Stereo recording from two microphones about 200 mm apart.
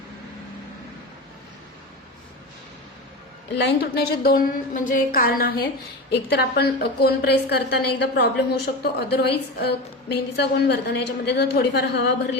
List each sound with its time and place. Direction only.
3.6 s a woman's voice: 50° left (ahead or behind)